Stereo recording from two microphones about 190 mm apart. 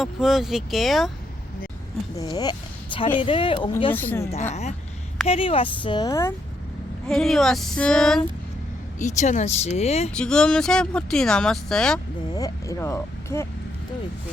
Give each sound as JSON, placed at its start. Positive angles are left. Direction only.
{"t": 0.0, "sound": "speech", "side_deg": 0}
{"t": 2.1, "sound": "speech", "side_deg": 20}
{"t": 3.9, "sound": "speech", "side_deg": 10}
{"t": 4.3, "sound": "speech", "side_deg": 35}
{"t": 7.1, "sound": "speech", "side_deg": 0}
{"t": 9.0, "sound": "speech", "side_deg": 40}
{"t": 10.2, "sound": "speech", "side_deg": 5}
{"t": 12.3, "sound": "speech", "side_deg": 20}